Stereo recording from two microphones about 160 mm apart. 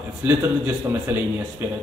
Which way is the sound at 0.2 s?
10° right (ahead or behind).